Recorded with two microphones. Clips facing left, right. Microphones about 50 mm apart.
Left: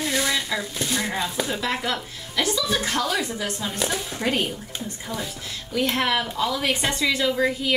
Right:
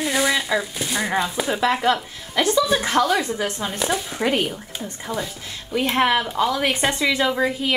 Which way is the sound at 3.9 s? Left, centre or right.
Centre.